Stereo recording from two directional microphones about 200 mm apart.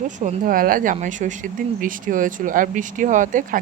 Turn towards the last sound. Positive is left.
turn(degrees=-40)  # may be behind; listen again after turning